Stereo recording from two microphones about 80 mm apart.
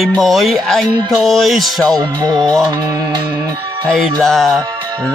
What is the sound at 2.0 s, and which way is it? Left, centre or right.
Speech, right.